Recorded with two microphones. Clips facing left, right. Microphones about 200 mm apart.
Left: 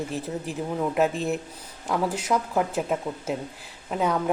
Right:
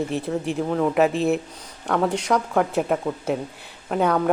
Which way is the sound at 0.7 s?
70° right (ahead or behind).